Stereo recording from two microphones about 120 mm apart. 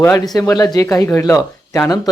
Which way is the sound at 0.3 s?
30° left (ahead or behind).